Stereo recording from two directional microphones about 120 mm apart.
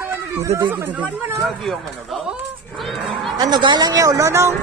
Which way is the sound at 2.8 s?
Centre (ahead or behind).